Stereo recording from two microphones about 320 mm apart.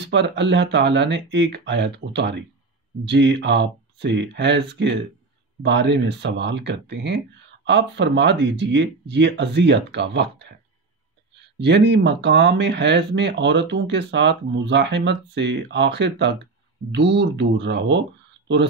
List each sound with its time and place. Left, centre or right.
0.0 s speech: right
11.5 s speech: right